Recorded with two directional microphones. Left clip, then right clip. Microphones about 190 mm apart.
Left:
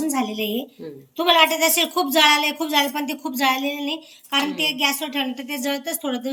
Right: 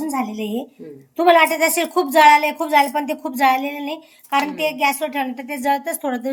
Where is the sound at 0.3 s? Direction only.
30° right (ahead or behind).